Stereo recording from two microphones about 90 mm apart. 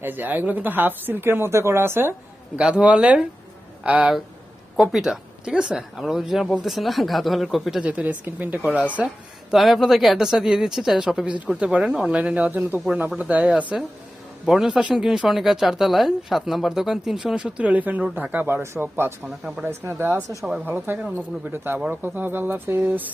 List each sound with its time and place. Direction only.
0.0 s speech: 20° right (ahead or behind)
2.6 s speech: 10° right (ahead or behind)
4.8 s a woman's voice: 5° right (ahead or behind)
7.9 s speech: 15° right (ahead or behind)
9.5 s a woman's voice: centre (ahead or behind); by 22.8 s 25° right (ahead or behind)